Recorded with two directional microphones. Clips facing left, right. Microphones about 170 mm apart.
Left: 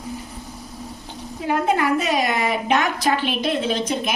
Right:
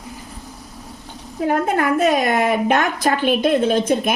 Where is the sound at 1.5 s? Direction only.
50° right (ahead or behind).